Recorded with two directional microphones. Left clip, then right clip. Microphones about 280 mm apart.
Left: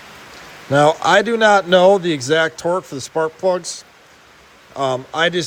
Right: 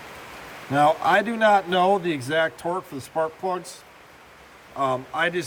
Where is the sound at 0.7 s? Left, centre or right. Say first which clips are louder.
Left 6 dB; centre.